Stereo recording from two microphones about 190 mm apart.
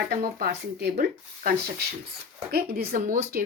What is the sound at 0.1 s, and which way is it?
Speech, 50° right (ahead or behind).